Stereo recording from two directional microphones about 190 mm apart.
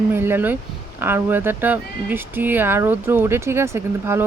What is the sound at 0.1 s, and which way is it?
Speech, 10° right (ahead or behind).